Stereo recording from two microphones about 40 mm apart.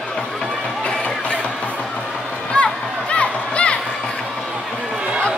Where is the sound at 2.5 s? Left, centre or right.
Left.